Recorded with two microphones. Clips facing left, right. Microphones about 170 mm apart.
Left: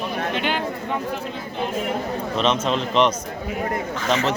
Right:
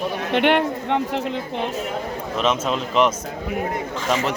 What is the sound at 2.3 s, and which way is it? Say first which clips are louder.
Speech: even; 5° right (ahead or behind).